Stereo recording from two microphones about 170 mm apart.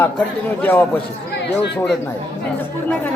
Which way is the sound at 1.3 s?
75° left (ahead or behind).